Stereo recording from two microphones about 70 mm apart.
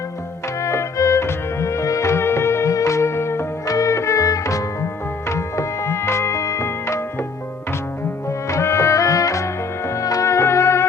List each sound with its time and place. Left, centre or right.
0.6 s music: left
3.7 s music: left
8.4 s music: left